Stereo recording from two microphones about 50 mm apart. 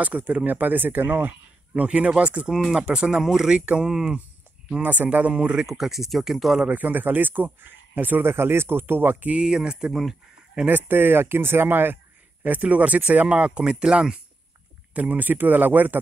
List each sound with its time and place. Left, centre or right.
0.0 s speech: right
1.7 s speech: right
2.4 s speech: centre
4.8 s speech: right
5.3 s speech: centre
5.7 s speech: centre
6.7 s speech: right
8.3 s speech: right
9.3 s speech: centre
10.9 s speech: right
12.4 s speech: right; by 14.1 s centre
15.0 s speech: right